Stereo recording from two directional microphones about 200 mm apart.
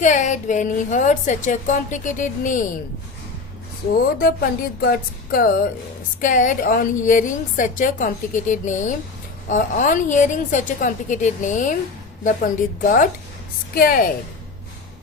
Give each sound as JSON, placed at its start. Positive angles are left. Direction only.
{"t": 0.0, "sound": "a woman's voice", "side_deg": 40}
{"t": 4.2, "sound": "a woman's voice", "side_deg": 50}